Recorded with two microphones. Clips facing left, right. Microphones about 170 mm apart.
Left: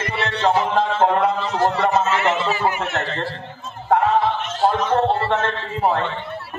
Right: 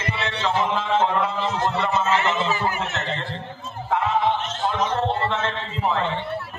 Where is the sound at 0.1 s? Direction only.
55° left (ahead or behind).